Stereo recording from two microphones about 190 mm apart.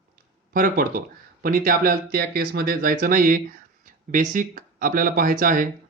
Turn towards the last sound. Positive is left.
turn(degrees=-45)  # may be behind; listen again after turning